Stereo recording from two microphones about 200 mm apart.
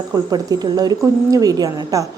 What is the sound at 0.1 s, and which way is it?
A woman's voice, 20° right (ahead or behind).